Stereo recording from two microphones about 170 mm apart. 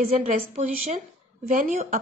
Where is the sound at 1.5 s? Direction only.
55° right (ahead or behind).